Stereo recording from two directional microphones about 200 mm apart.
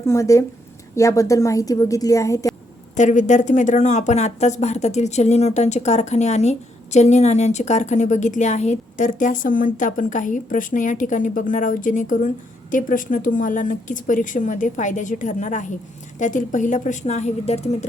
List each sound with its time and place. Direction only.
0.1 s a woman's voice: 15° left (ahead or behind)
2.9 s speech: 35° left (ahead or behind)